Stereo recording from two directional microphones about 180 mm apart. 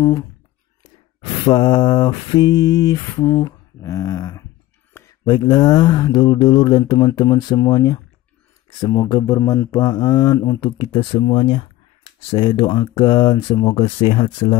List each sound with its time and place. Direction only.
0.0 s speech: 20° left (ahead or behind)
1.4 s speech: 25° left (ahead or behind)